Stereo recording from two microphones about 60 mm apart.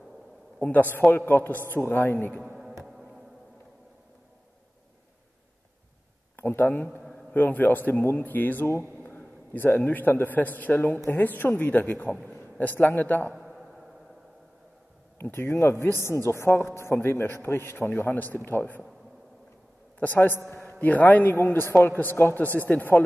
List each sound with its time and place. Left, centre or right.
0.6 s a man's voice: left
2.4 s music: centre
6.3 s speech: left
7.0 s a sound: centre
7.3 s a man's voice: left
13.3 s a sound: centre
15.3 s a man's voice: left
20.0 s a man's voice: left
20.8 s a man's voice: left